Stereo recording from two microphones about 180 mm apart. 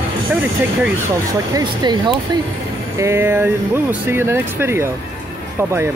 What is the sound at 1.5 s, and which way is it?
Speech, 25° right (ahead or behind).